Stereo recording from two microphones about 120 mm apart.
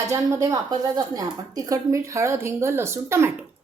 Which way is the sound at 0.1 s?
25° right (ahead or behind).